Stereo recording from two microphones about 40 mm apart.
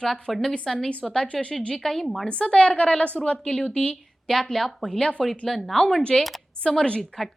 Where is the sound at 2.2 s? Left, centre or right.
Left.